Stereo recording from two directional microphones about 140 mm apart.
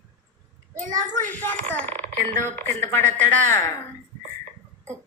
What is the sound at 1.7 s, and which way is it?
Speech, 10° left (ahead or behind).